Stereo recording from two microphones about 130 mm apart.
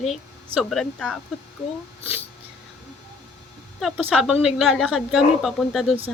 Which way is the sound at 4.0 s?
10° right (ahead or behind).